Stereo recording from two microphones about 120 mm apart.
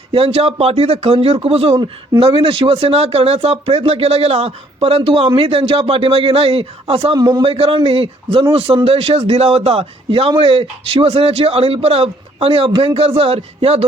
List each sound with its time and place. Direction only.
0.1 s speech: 55° right (ahead or behind)
1.7 s speech: 40° right (ahead or behind)
7.2 s a man's voice: 35° right (ahead or behind)
7.4 s speech: 50° right (ahead or behind)